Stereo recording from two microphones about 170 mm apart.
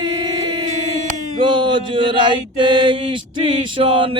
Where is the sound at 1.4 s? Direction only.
30° right (ahead or behind).